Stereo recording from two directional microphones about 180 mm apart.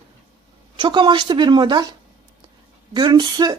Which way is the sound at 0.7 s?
25° right (ahead or behind).